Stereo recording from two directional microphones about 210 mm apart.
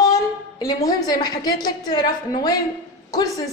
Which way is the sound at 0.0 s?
15° left (ahead or behind).